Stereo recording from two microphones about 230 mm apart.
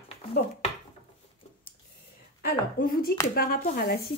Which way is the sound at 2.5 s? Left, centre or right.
Left.